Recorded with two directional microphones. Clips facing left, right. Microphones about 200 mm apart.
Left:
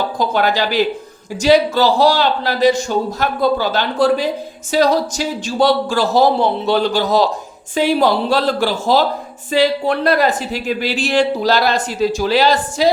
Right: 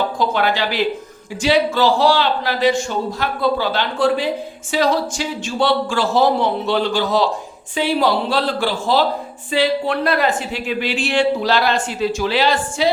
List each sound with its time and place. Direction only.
0.2 s speech: 40° left (ahead or behind)